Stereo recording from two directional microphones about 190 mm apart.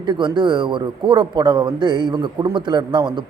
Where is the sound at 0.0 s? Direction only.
25° right (ahead or behind).